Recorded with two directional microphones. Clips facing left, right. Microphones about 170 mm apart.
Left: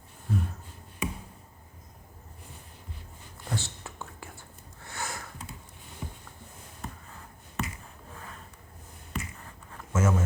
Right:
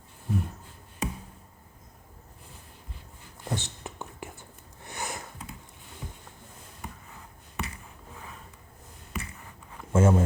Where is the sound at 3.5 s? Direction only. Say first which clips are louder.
Right 1 dB; 20° right (ahead or behind).